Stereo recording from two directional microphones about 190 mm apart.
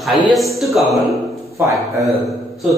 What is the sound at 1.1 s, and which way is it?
Speech, 15° right (ahead or behind).